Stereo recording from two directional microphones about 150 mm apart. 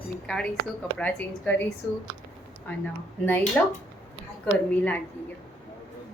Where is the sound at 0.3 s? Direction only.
5° left (ahead or behind).